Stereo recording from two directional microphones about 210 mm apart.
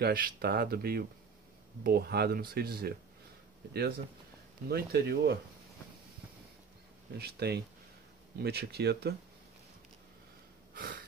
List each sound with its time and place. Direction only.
0.0 s speech: 45° right (ahead or behind)
4.6 s speech: 50° right (ahead or behind)
7.2 s speech: 50° right (ahead or behind)
10.7 s a sound: 45° right (ahead or behind)